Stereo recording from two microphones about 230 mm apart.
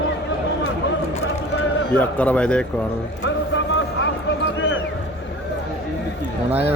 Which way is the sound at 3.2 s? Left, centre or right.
Left.